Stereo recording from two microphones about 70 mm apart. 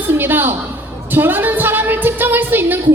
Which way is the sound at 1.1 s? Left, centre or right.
Right.